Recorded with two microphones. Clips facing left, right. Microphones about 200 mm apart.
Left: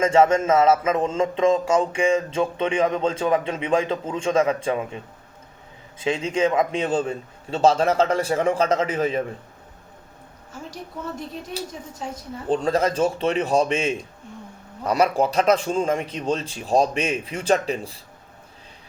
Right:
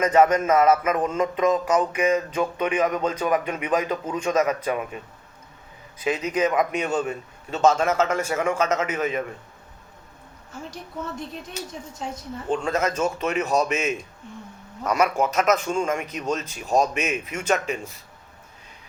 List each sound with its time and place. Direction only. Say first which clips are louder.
0.0 s speech: left 1 dB; 25° left (ahead or behind)
6.0 s a man's voice: left 1 dB; 25° left (ahead or behind)
11.6 s a man's voice: left 1 dB; 35° left (ahead or behind)